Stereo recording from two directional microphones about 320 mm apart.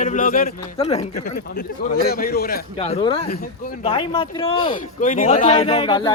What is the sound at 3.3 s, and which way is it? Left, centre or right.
Speech, left.